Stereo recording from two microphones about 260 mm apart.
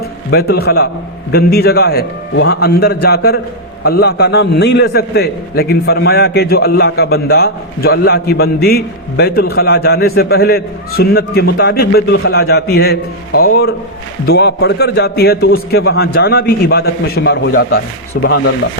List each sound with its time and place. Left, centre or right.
0.3 s a man's voice: left